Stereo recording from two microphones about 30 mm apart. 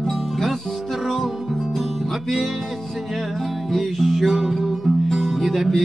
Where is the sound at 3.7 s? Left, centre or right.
Centre.